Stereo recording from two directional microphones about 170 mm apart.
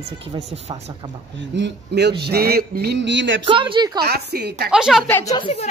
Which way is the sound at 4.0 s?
65° right (ahead or behind).